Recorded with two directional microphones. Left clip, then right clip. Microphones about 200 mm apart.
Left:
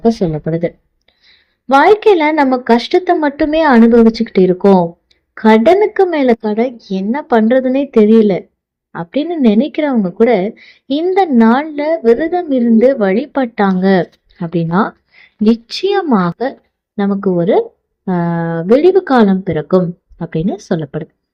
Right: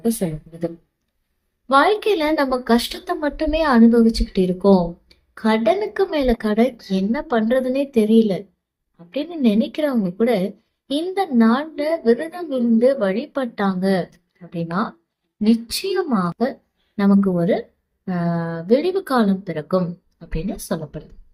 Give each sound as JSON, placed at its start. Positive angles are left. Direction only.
{"t": 0.0, "sound": "a woman's voice", "side_deg": 35}